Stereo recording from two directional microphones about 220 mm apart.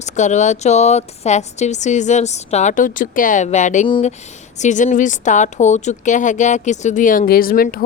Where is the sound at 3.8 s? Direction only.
20° left (ahead or behind).